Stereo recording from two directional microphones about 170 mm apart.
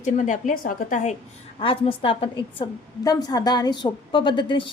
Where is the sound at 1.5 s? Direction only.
30° left (ahead or behind).